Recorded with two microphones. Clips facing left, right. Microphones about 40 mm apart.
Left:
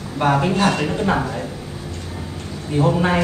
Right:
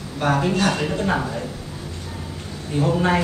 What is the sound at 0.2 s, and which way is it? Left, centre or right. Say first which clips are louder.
Speech: left 3 dB; centre.